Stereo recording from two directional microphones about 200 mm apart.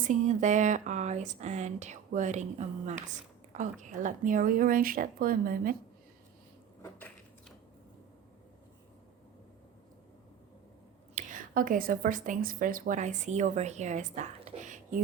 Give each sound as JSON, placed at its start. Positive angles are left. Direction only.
{"t": 0.0, "sound": "speech", "side_deg": -40}
{"t": 6.8, "sound": "a sound", "side_deg": 10}
{"t": 11.1, "sound": "a woman's voice", "side_deg": -40}